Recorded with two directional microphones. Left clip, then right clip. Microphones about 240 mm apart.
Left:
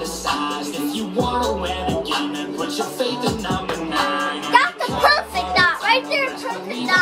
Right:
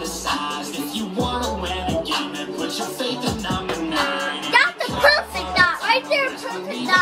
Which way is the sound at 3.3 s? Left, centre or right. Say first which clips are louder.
Left 1 dB; centre.